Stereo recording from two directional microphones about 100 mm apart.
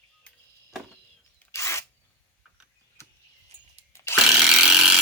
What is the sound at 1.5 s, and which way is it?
Drill, 30° left (ahead or behind).